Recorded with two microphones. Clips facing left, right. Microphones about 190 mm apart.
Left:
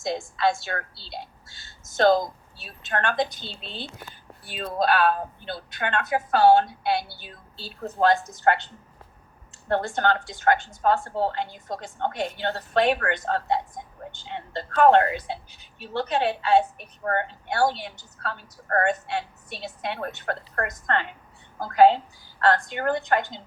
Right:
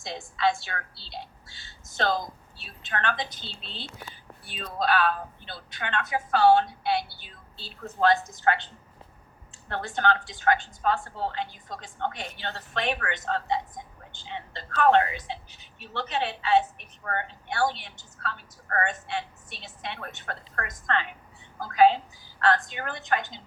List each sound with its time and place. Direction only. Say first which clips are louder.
0.0 s a woman's voice: left 3 dB; 45° left (ahead or behind)
7.9 s a woman's voice: left 2 dB; 45° left (ahead or behind)
9.6 s a woman's voice: left 4 dB; 50° left (ahead or behind)